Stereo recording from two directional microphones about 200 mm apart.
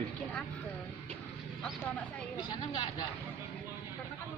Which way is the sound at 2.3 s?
20° left (ahead or behind).